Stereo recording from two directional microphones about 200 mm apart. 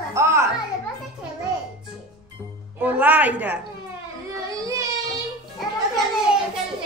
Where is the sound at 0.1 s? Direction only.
15° right (ahead or behind).